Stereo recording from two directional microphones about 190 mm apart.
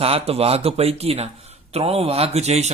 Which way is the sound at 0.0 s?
30° right (ahead or behind).